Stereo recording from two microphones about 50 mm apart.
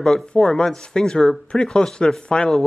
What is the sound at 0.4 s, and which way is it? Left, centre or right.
Speech, centre.